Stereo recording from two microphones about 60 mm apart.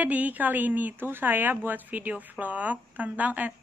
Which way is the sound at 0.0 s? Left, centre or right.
Right.